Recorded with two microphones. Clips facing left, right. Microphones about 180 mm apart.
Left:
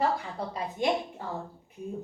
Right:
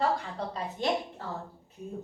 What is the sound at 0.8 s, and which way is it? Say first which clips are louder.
Speech: left 2 dB; 15° left (ahead or behind).